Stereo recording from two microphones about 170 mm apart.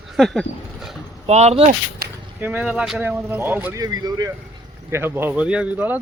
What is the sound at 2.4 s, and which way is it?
Speech, 10° right (ahead or behind).